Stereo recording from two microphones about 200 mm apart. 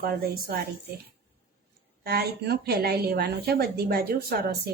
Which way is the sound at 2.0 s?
50° right (ahead or behind).